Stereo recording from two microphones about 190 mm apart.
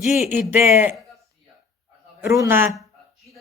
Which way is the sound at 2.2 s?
15° right (ahead or behind).